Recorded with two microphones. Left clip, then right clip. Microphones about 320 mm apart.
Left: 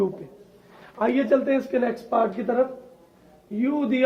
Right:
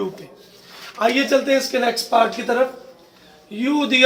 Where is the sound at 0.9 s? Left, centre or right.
Left.